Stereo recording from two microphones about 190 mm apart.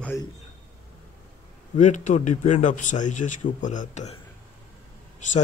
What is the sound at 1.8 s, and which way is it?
Speech, 40° left (ahead or behind).